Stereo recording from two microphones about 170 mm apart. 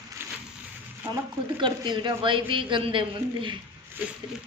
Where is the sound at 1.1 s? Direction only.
20° right (ahead or behind).